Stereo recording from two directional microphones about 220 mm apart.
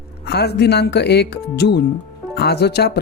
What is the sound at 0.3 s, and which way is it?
Speech, 50° left (ahead or behind).